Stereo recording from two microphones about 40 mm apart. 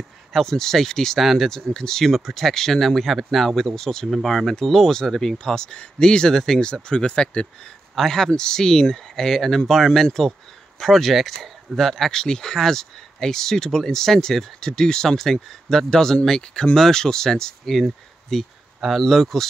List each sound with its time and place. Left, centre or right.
0.3 s speech: centre
6.6 s speech: left
7.9 s speech: centre